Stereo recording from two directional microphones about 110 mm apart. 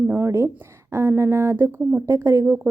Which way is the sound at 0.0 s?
20° right (ahead or behind).